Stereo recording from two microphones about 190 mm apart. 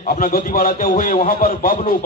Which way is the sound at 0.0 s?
50° left (ahead or behind).